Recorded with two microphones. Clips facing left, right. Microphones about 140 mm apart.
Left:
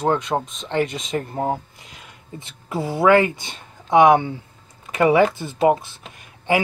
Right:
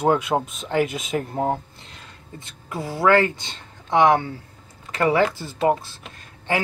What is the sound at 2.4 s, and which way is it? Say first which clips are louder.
Speech: left 5 dB; 25° left (ahead or behind).